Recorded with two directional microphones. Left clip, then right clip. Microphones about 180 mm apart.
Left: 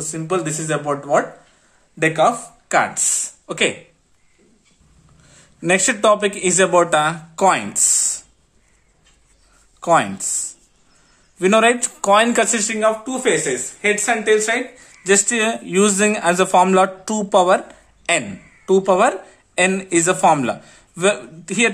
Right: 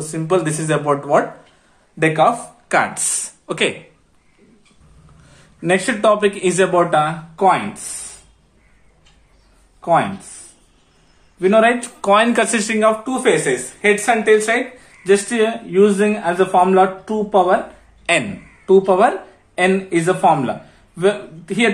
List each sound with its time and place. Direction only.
0.0 s speech: 20° left (ahead or behind)
5.2 s speech: 25° left (ahead or behind); by 7.6 s 55° left (ahead or behind)
9.8 s a sound: 50° left (ahead or behind)
11.3 s speech: 45° left (ahead or behind); by 14.6 s 15° left (ahead or behind)
14.8 s a man's voice: 35° left (ahead or behind)
18.1 s speech: 30° left (ahead or behind)